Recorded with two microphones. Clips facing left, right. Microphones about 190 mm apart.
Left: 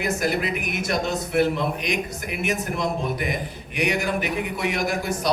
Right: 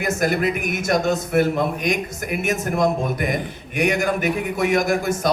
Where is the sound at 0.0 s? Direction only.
50° right (ahead or behind).